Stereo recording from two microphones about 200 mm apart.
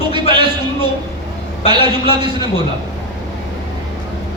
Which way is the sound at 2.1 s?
20° right (ahead or behind).